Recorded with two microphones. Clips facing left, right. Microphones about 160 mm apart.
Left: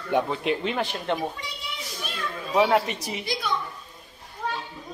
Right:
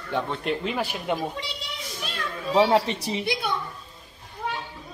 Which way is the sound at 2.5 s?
30° right (ahead or behind).